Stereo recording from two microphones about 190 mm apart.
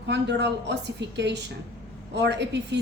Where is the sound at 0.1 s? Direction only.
65° right (ahead or behind).